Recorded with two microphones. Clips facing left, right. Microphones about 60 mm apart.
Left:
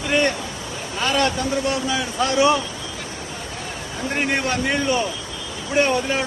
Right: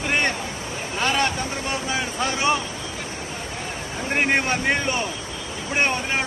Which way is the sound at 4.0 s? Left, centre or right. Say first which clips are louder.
Right 1 dB; right.